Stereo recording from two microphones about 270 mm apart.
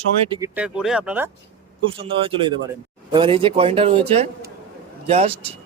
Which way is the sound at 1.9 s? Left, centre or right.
Centre.